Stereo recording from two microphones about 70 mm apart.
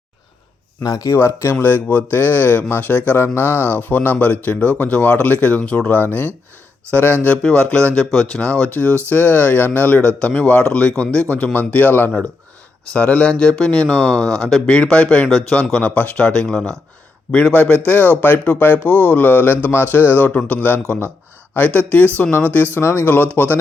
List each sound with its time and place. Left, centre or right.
0.8 s speech: left
1.1 s a man's voice: left
10.1 s a man's voice: centre
22.8 s speech: left